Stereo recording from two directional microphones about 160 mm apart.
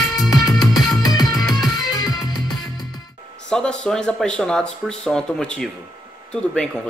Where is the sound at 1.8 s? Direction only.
25° left (ahead or behind).